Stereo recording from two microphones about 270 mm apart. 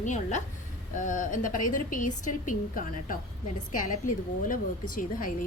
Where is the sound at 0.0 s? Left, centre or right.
Left.